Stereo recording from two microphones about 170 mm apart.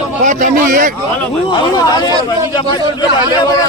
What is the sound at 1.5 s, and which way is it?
Speech, 25° left (ahead or behind).